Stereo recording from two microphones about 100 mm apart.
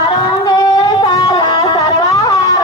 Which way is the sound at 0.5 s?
40° left (ahead or behind).